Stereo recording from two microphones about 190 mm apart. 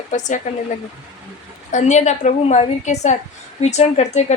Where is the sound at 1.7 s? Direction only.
40° left (ahead or behind).